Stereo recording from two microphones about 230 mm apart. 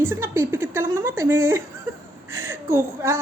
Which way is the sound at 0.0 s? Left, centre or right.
Centre.